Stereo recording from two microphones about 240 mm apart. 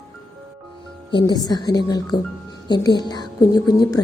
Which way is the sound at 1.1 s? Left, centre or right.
Centre.